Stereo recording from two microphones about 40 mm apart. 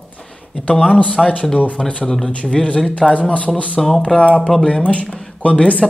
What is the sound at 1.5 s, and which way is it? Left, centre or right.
Speech, left.